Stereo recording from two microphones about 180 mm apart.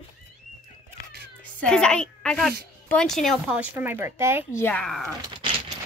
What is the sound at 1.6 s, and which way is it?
A woman's voice, 5° left (ahead or behind).